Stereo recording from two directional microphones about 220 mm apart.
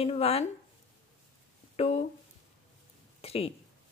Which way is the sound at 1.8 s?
30° left (ahead or behind).